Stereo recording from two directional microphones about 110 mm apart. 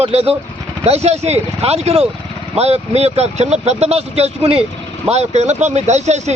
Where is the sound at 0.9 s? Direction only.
75° right (ahead or behind).